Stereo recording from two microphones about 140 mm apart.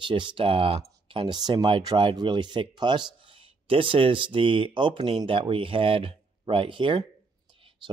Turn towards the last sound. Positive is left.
turn(degrees=-35)  # may be behind; listen again after turning